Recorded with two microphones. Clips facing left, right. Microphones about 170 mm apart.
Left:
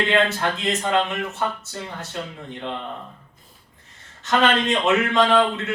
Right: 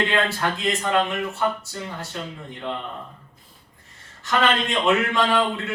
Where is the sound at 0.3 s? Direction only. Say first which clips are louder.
Left 1 dB; 20° left (ahead or behind).